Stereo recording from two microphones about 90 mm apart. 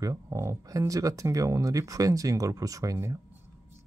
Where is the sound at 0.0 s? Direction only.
35° right (ahead or behind).